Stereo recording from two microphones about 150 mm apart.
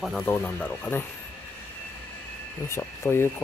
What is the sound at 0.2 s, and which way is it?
Speech, 15° left (ahead or behind).